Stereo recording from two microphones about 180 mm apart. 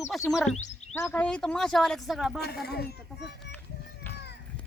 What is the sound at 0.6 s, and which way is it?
Music, 40° left (ahead or behind).